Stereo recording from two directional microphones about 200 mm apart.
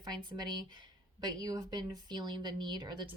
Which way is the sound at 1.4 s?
20° right (ahead or behind).